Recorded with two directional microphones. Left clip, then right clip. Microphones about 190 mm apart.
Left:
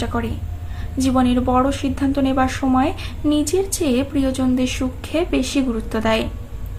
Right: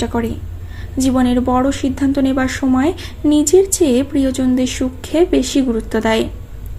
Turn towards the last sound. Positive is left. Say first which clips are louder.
# right 4 dB
turn(degrees=-25)  # may be behind; listen again after turning